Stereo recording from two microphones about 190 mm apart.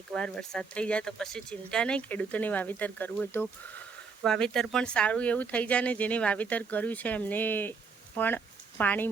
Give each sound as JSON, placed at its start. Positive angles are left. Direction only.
{"t": 0.1, "sound": "speech", "side_deg": 5}